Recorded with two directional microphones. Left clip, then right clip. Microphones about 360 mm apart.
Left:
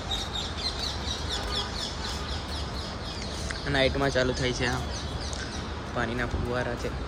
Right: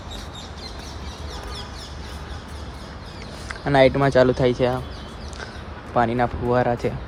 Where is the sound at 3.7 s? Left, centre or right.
Centre.